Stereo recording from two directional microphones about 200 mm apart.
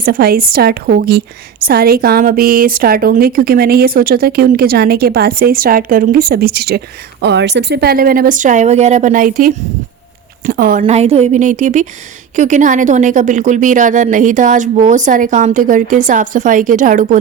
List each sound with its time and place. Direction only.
0.0 s a woman's voice: 50° right (ahead or behind)